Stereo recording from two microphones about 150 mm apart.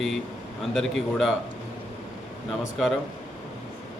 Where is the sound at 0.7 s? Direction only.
Centre (ahead or behind).